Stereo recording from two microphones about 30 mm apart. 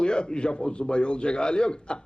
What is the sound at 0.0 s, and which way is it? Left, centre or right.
A man's voice, left.